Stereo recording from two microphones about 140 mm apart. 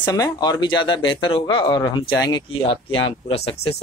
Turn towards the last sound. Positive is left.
turn(degrees=45)  # may be behind; listen again after turning